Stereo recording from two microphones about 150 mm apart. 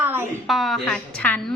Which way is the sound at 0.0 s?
10° right (ahead or behind).